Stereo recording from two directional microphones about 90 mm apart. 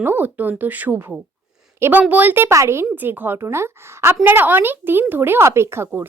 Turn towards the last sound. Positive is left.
turn(degrees=-30)  # may be behind; listen again after turning